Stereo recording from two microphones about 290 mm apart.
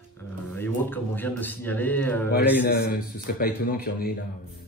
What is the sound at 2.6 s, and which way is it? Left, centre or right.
A man's voice, left.